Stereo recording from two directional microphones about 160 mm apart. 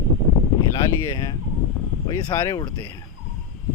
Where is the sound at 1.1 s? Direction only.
20° left (ahead or behind).